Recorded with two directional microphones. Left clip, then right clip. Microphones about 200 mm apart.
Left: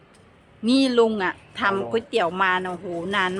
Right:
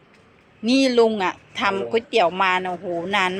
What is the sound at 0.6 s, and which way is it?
Speech, centre (ahead or behind).